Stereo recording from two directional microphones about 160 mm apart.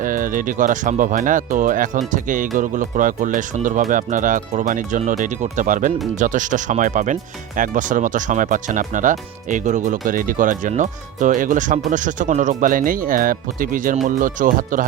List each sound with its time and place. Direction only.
0.0 s speech: 55° right (ahead or behind)